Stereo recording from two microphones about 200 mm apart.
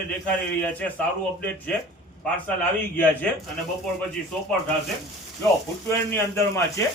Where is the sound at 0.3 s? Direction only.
5° left (ahead or behind).